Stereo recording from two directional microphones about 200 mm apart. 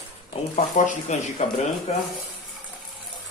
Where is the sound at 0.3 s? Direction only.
35° left (ahead or behind).